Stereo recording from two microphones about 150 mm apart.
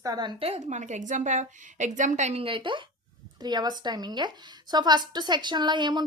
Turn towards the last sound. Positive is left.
turn(degrees=-30)  # may be behind; listen again after turning